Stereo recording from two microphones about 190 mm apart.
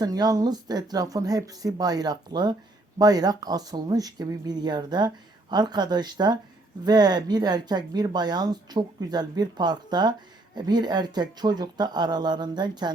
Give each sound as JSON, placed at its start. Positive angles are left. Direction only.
{"t": 0.0, "sound": "speech", "side_deg": -20}